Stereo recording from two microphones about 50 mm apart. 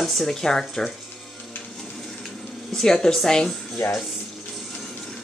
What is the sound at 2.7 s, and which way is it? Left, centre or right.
Speech, centre.